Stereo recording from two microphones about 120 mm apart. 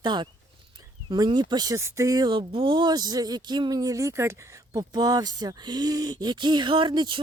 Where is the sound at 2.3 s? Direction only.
45° right (ahead or behind).